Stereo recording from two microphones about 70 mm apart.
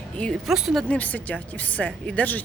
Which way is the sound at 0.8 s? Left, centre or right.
Left.